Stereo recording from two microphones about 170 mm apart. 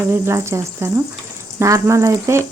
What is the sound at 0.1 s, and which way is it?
Speech, 15° right (ahead or behind).